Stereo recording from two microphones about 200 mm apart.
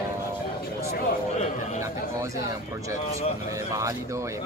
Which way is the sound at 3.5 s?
15° right (ahead or behind).